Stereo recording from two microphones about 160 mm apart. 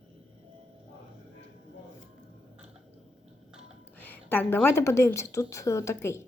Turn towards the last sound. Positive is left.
turn(degrees=15)  # may be behind; listen again after turning